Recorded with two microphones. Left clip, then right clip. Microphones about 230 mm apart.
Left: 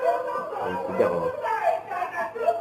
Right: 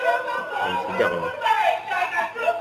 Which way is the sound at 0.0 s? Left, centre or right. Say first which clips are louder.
Right 2 dB; right.